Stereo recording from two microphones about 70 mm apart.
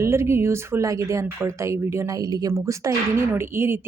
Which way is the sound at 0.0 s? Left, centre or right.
Right.